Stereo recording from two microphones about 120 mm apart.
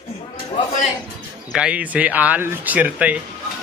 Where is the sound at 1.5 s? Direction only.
10° right (ahead or behind).